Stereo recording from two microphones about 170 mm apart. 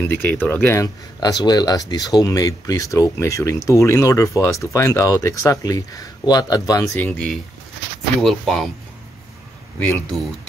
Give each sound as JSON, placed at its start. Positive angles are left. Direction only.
{"t": 0.1, "sound": "speech", "side_deg": 10}
{"t": 7.0, "sound": "speech", "side_deg": 5}
{"t": 9.8, "sound": "speech", "side_deg": 10}